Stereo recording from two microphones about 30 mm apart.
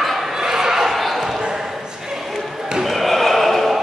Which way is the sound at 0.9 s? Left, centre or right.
Centre.